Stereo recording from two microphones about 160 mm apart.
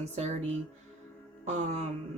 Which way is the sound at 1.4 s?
45° right (ahead or behind).